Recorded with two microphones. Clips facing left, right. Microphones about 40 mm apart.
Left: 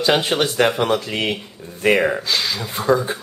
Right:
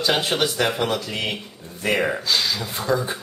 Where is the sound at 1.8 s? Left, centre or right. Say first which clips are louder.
Left 5 dB; centre.